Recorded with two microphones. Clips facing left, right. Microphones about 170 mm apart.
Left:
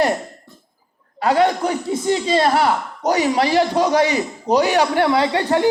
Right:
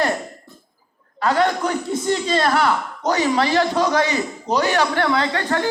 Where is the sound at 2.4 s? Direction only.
35° left (ahead or behind).